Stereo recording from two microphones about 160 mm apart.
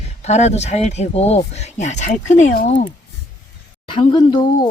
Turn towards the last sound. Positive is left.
turn(degrees=30)  # may be behind; listen again after turning